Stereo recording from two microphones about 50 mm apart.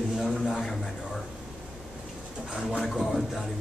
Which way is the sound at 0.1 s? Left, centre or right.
Centre.